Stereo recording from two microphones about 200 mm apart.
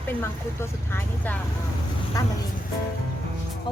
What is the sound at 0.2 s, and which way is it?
Speech, 10° left (ahead or behind).